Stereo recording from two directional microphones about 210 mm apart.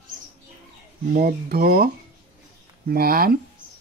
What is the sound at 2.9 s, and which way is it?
Speech, 45° right (ahead or behind).